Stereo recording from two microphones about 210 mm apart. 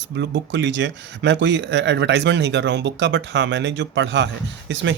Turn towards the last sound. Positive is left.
turn(degrees=-60)  # may be behind; listen again after turning